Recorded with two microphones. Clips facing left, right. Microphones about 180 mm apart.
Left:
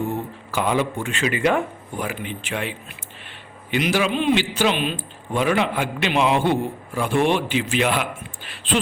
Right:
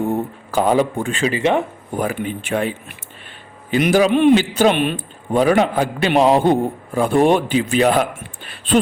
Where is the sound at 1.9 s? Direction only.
45° right (ahead or behind).